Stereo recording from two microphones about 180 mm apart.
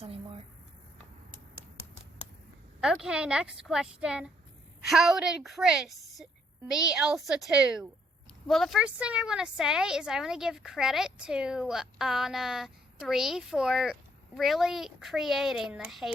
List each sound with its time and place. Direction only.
0.0 s speech: 35° right (ahead or behind)
2.8 s a woman's voice: 5° right (ahead or behind)